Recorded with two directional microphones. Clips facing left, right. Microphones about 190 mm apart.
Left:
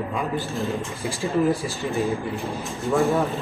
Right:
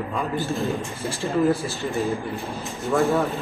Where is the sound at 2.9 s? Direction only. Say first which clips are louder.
Even; centre (ahead or behind).